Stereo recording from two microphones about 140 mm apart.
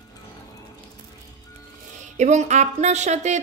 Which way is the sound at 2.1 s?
55° right (ahead or behind).